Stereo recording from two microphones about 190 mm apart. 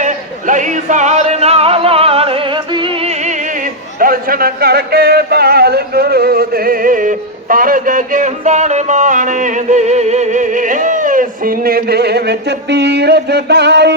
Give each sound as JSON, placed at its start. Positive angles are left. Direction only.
{"t": 0.0, "sound": "yodeling", "side_deg": -40}